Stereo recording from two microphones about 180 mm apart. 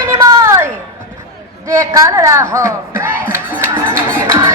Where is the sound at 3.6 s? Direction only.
15° right (ahead or behind).